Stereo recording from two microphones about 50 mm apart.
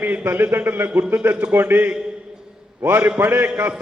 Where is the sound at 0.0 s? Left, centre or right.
Right.